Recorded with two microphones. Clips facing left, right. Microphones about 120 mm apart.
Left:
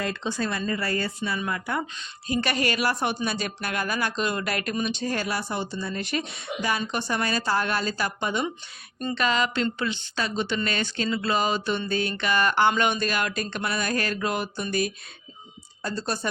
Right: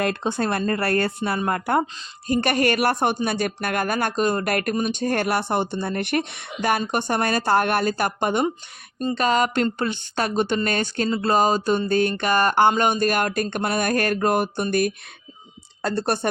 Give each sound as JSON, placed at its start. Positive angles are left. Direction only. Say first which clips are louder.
{"t": 0.0, "sound": "a woman's voice", "louder": "right 5 dB", "side_deg": -60}
{"t": 9.0, "sound": "a woman's voice", "louder": "right 4 dB", "side_deg": -35}